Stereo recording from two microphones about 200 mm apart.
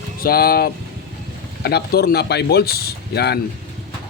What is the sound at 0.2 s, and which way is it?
Speech, 50° left (ahead or behind).